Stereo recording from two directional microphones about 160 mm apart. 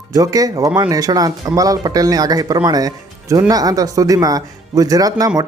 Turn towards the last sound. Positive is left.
turn(degrees=-20)  # may be behind; listen again after turning